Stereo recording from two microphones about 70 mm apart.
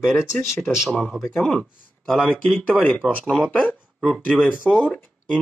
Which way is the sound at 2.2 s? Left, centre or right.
Centre.